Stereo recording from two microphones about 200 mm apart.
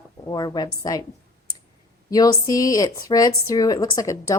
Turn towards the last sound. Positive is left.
turn(degrees=15)  # may be behind; listen again after turning